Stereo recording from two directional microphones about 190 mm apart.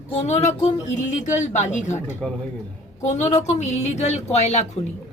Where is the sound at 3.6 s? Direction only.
35° left (ahead or behind).